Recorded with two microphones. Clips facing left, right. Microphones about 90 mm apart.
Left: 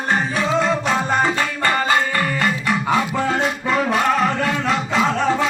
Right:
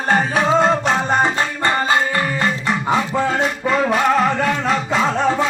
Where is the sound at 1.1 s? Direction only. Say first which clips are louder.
Right 1 dB; 25° right (ahead or behind).